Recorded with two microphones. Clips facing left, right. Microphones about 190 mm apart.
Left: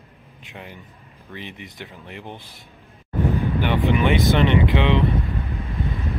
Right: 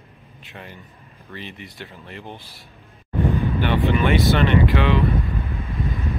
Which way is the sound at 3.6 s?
15° left (ahead or behind).